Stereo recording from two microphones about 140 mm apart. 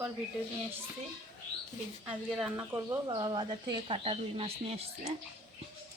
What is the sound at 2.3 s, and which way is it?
Speech, 5° right (ahead or behind).